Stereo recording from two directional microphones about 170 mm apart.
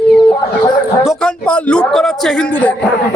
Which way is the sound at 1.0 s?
5° left (ahead or behind).